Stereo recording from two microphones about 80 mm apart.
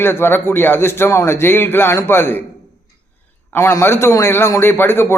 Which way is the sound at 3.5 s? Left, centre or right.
Left.